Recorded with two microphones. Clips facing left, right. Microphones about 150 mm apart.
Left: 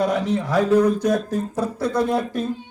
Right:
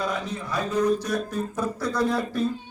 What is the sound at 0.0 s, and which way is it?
Speech, 85° left.